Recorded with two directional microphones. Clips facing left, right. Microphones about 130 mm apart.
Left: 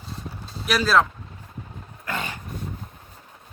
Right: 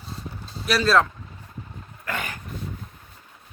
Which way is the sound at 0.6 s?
Centre (ahead or behind).